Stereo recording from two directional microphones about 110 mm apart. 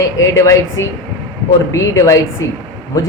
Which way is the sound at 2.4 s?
30° left (ahead or behind).